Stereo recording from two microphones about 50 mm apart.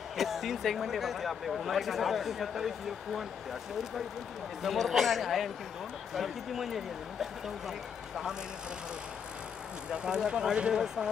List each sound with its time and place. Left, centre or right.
0.2 s speech: centre
4.6 s speech: centre
9.8 s speech: centre